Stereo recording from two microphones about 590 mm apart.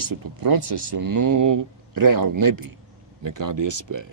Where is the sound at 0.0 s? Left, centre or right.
Right.